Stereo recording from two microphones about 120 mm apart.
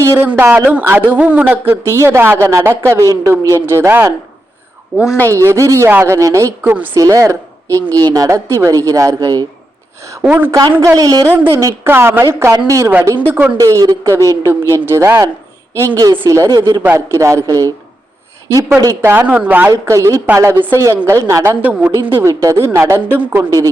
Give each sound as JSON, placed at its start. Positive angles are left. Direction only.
{"t": 0.0, "sound": "a woman's voice", "side_deg": -25}
{"t": 5.3, "sound": "a woman's voice", "side_deg": -25}
{"t": 6.1, "sound": "a woman's voice", "side_deg": -25}
{"t": 6.6, "sound": "speech", "side_deg": -15}
{"t": 6.9, "sound": "a woman's voice", "side_deg": -25}
{"t": 10.2, "sound": "speech", "side_deg": -15}
{"t": 10.5, "sound": "a woman's voice", "side_deg": -35}
{"t": 11.3, "sound": "a woman's voice", "side_deg": -20}
{"t": 13.1, "sound": "speech", "side_deg": -15}
{"t": 13.6, "sound": "a woman's voice", "side_deg": -30}
{"t": 19.0, "sound": "a woman's voice", "side_deg": -15}